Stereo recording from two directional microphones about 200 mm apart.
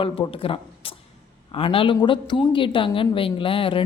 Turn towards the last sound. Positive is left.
turn(degrees=25)  # may be behind; listen again after turning